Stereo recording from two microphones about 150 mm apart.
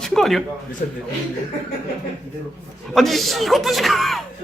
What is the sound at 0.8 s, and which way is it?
Speech, 60° left (ahead or behind).